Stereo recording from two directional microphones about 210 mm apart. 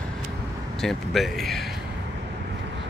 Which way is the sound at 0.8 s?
Centre (ahead or behind).